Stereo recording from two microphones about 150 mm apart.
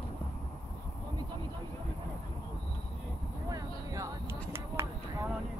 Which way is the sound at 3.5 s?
20° right (ahead or behind).